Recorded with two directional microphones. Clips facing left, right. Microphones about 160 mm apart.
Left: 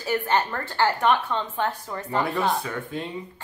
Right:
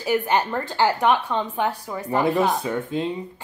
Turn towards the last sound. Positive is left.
turn(degrees=-20)  # may be behind; listen again after turning